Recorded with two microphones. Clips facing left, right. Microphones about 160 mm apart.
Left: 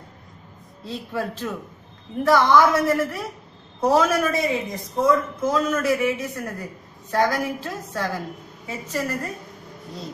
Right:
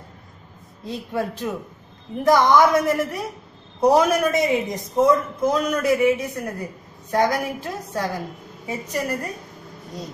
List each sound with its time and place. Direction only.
0.8 s a man's voice: 15° right (ahead or behind)